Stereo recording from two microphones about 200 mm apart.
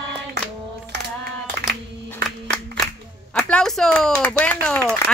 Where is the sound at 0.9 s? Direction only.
55° right (ahead or behind).